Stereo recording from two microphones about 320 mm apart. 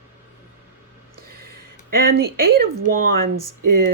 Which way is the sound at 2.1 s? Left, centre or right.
Right.